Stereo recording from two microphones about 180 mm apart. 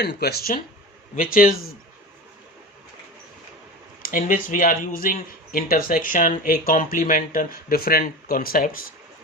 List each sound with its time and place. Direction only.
0.0 s speech: 65° left (ahead or behind)
4.0 s speech: 50° left (ahead or behind)